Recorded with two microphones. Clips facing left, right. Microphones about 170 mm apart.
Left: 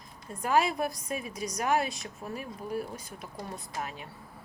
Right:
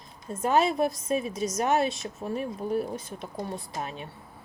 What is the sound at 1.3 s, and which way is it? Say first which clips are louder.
Speech: right 6 dB; 15° left (ahead or behind).